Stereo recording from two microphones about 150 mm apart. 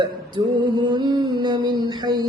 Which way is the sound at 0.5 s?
30° right (ahead or behind).